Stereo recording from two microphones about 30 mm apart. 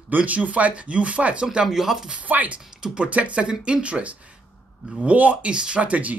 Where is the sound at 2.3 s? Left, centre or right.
Right.